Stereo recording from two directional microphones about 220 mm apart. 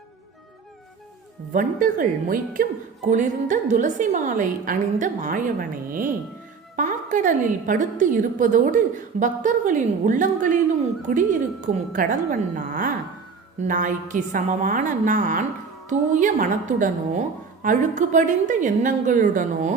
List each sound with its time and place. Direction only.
1.5 s a woman's voice: 40° right (ahead or behind)